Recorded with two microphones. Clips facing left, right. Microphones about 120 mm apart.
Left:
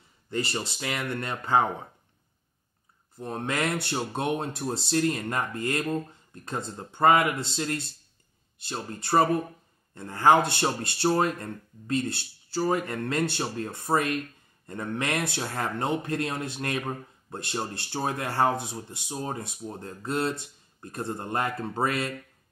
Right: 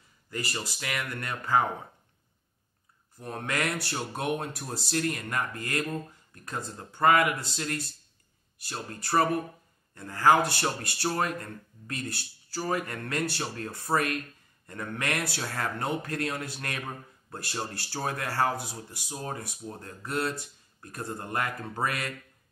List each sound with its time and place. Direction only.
0.3 s speech: 25° left (ahead or behind)
3.2 s speech: 25° left (ahead or behind)